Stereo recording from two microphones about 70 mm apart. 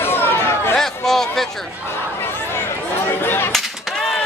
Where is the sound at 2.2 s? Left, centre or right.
Left.